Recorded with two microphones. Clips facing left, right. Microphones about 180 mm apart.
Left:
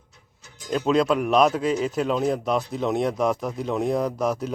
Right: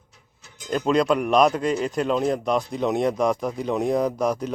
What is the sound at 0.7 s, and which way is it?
Speech, centre (ahead or behind).